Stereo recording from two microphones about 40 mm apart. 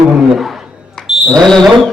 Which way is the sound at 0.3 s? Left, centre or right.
Centre.